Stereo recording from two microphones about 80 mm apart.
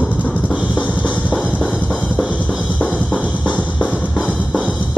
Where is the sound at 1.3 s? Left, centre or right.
Centre.